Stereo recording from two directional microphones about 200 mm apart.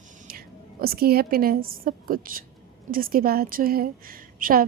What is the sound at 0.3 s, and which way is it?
A woman's voice, 50° right (ahead or behind).